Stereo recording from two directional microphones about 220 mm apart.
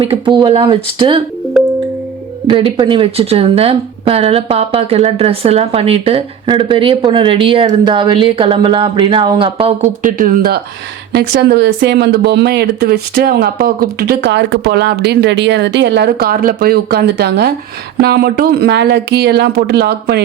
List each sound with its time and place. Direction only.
0.0 s speech: 25° right (ahead or behind)
2.5 s speech: 25° right (ahead or behind); by 20.2 s 45° right (ahead or behind)